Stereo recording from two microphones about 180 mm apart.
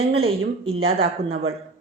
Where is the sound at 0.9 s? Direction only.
60° right (ahead or behind).